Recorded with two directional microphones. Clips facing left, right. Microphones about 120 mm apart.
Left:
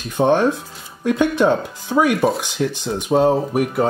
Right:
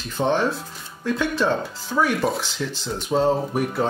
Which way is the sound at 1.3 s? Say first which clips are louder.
Left 5 dB; 15° left (ahead or behind).